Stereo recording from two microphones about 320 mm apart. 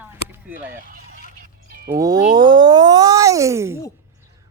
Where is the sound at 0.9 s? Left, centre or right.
Right.